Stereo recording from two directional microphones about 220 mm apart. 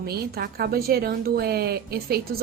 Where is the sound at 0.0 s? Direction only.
45° right (ahead or behind).